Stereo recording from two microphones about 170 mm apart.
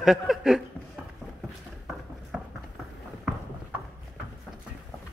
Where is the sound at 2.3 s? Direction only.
5° right (ahead or behind).